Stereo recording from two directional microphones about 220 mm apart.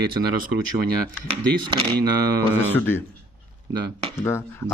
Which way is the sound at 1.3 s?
25° right (ahead or behind).